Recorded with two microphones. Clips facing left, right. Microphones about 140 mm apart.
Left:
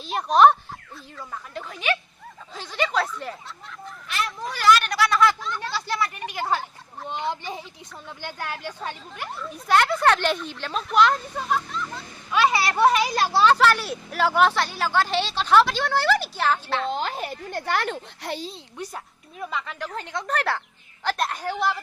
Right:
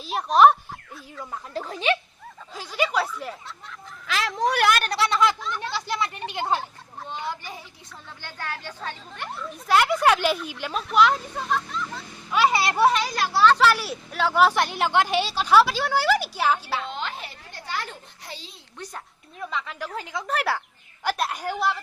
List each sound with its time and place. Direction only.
0.0 s speech: centre (ahead or behind)
1.5 s speech: 35° right (ahead or behind)
2.6 s a woman's voice: 5° right (ahead or behind)
4.0 s speech: 90° right; by 4.8 s 65° right (ahead or behind)
4.8 s speech: 30° right (ahead or behind)
5.7 s a sound: 20° right (ahead or behind)
7.1 s a sound: 20° left (ahead or behind)
8.2 s speech: 15° left (ahead or behind); by 13.0 s 5° right (ahead or behind)
13.1 s speech: 35° left (ahead or behind)
13.6 s speech: 5° right (ahead or behind)
14.5 s a woman's voice: 20° right (ahead or behind)
16.9 s speech: 40° left (ahead or behind); by 18.3 s 75° left (ahead or behind)
18.8 s a woman's voice: 5° left (ahead or behind)